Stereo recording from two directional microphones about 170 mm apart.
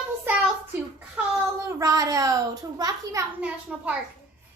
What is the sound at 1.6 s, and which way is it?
A child's voice, 20° right (ahead or behind).